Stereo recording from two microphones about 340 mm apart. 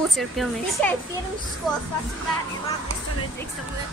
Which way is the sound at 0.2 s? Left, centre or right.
Centre.